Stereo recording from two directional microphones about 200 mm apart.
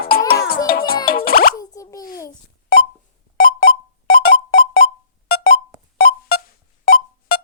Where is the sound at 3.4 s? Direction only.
50° left (ahead or behind).